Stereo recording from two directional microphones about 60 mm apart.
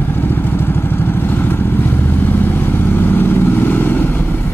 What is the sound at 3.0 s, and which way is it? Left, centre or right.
Vehicle, left.